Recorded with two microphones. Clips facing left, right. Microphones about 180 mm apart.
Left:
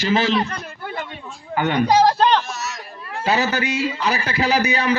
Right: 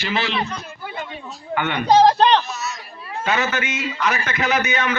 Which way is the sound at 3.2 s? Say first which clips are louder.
Left 2 dB; 35° left (ahead or behind).